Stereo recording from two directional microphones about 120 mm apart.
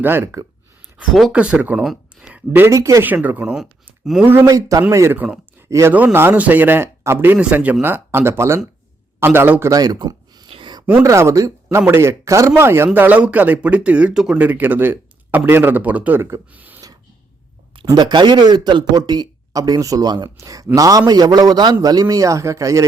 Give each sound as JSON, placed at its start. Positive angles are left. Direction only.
{"t": 0.0, "sound": "speech", "side_deg": -20}
{"t": 2.6, "sound": "speech", "side_deg": -25}
{"t": 3.1, "sound": "speech", "side_deg": -15}
{"t": 4.3, "sound": "speech", "side_deg": -25}
{"t": 5.6, "sound": "speech", "side_deg": -25}
{"t": 5.9, "sound": "speech", "side_deg": -15}
{"t": 10.5, "sound": "a sound", "side_deg": -40}
{"t": 11.0, "sound": "speech", "side_deg": -25}
{"t": 18.0, "sound": "speech", "side_deg": -40}